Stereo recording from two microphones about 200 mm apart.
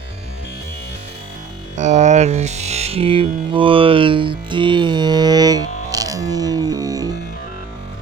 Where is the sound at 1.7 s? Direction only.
35° right (ahead or behind); by 7.2 s 20° right (ahead or behind).